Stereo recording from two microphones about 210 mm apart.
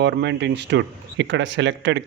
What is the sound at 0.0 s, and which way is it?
Speech, 55° right (ahead or behind).